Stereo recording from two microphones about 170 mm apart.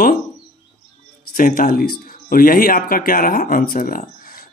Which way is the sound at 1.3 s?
60° left (ahead or behind).